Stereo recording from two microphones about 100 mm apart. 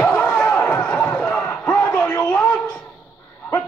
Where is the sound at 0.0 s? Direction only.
20° left (ahead or behind).